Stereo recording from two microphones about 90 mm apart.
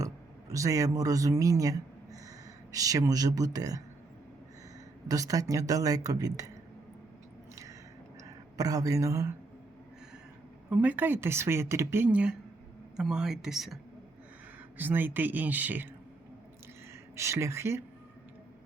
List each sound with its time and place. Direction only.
0.0 s speech: 40° right (ahead or behind)
5.0 s speech: 40° right (ahead or behind)
7.5 s biting: 40° right (ahead or behind)
8.2 s speech: 40° right (ahead or behind)
10.7 s speech: 15° right (ahead or behind)
12.1 s a woman's voice: 10° right (ahead or behind)
14.8 s speech: 20° right (ahead or behind)
17.2 s speech: 30° right (ahead or behind)